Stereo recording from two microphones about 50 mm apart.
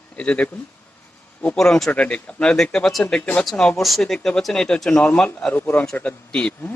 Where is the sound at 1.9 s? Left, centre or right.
Left.